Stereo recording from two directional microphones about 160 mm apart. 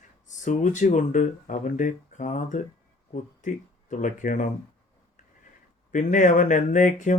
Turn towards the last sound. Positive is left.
turn(degrees=50)  # may be behind; listen again after turning